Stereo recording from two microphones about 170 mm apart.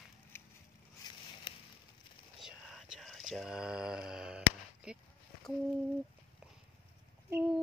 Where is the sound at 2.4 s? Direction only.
Centre (ahead or behind).